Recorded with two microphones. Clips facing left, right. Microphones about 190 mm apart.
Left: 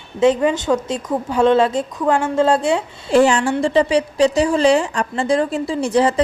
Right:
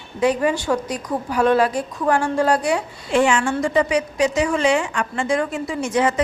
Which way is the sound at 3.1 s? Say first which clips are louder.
Left 4 dB; 35° left (ahead or behind).